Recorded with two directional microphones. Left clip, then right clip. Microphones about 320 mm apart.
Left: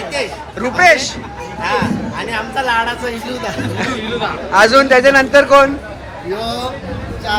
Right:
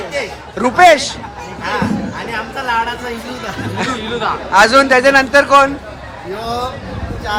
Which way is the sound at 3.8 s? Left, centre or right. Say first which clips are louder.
Right 2 dB; centre.